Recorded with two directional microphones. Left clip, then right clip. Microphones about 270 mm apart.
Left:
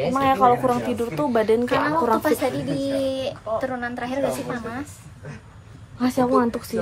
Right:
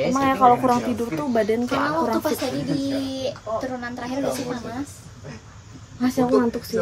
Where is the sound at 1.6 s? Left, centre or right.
Left.